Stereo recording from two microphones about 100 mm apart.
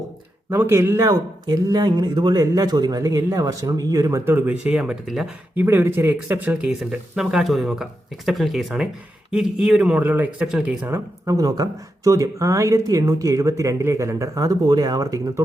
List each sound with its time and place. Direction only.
0.5 s speech: 25° right (ahead or behind)
4.3 s speech: 15° right (ahead or behind)
5.5 s speech: 25° right (ahead or behind)
10.8 s speech: 30° right (ahead or behind)